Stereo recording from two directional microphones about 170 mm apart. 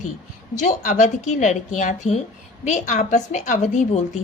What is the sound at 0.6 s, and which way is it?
A woman's voice, 45° left (ahead or behind).